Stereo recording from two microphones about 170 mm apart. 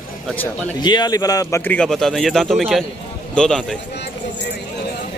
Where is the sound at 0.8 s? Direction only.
25° left (ahead or behind); by 3.6 s 5° left (ahead or behind).